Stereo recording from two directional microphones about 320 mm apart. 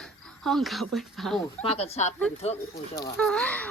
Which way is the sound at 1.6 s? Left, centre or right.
Centre.